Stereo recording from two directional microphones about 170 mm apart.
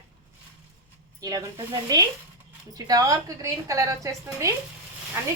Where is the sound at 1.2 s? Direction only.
20° right (ahead or behind).